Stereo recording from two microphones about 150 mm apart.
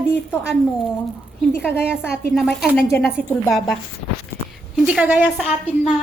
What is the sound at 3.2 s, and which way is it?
Speech, 60° right (ahead or behind).